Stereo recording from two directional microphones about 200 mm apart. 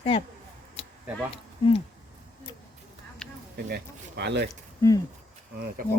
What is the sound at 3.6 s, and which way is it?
Speech, 55° right (ahead or behind).